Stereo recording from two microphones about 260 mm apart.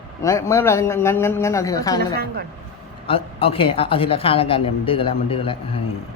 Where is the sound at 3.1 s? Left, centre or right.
Left.